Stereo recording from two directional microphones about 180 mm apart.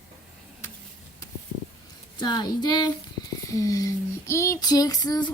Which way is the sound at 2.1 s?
25° left (ahead or behind).